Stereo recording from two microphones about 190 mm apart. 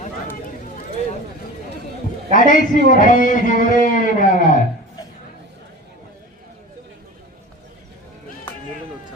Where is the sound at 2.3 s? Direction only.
45° left (ahead or behind).